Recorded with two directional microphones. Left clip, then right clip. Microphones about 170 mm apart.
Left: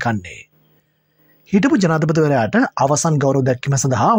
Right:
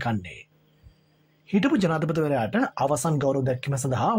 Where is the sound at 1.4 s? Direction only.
35° left (ahead or behind).